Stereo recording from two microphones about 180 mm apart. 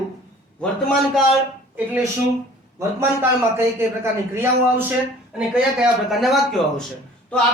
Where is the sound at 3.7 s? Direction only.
15° right (ahead or behind).